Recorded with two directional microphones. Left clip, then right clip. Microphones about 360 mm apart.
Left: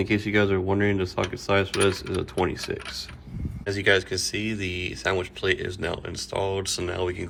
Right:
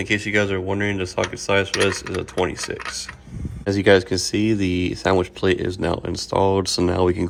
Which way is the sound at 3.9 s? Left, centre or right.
Right.